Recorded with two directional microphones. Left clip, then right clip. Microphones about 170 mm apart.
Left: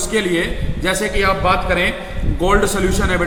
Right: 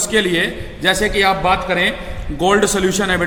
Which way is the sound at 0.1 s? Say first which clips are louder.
Right 2 dB; 25° right (ahead or behind).